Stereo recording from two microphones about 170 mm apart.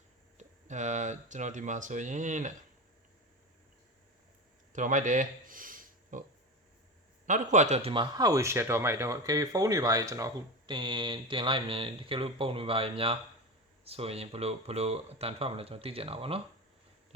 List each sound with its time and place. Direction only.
0.3 s speech: 45° right (ahead or behind)
4.7 s a sound: 50° right (ahead or behind)
7.3 s speech: 45° right (ahead or behind)